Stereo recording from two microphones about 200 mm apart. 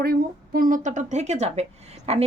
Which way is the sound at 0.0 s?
50° right (ahead or behind).